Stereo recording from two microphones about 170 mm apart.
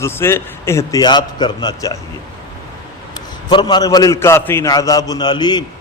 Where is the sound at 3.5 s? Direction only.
25° left (ahead or behind).